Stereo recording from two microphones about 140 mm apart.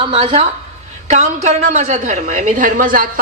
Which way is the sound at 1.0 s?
60° right (ahead or behind).